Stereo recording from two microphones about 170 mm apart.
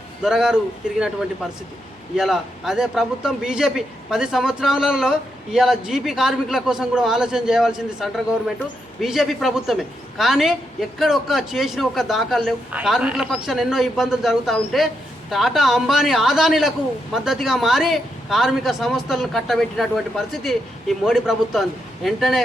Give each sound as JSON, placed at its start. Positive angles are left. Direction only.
{"t": 0.2, "sound": "a man's voice", "side_deg": -5}
{"t": 2.1, "sound": "a man's voice", "side_deg": -5}